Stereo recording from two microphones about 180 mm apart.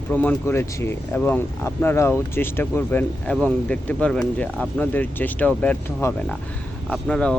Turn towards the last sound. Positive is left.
turn(degrees=5)  # may be behind; listen again after turning